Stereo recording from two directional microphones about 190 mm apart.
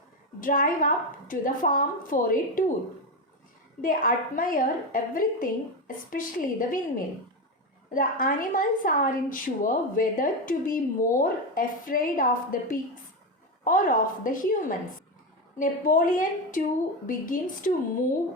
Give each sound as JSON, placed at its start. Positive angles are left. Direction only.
{"t": 0.3, "sound": "a woman's voice", "side_deg": 45}
{"t": 3.8, "sound": "a woman's voice", "side_deg": 45}
{"t": 7.9, "sound": "a woman's voice", "side_deg": 45}